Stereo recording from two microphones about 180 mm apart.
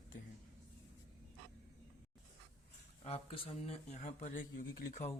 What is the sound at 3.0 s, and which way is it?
Speech, 35° left (ahead or behind).